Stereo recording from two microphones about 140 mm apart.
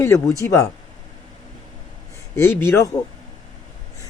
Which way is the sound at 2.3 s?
15° left (ahead or behind).